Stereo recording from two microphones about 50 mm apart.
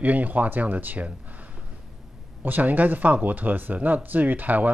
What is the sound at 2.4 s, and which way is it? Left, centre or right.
Speech, right.